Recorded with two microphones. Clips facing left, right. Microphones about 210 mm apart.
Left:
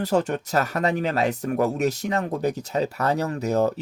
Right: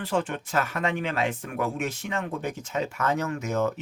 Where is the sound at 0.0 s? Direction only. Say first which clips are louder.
Left 5 dB; 40° left (ahead or behind).